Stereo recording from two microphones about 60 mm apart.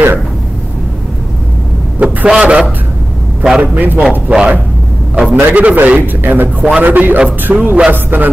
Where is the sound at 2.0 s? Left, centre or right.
Right.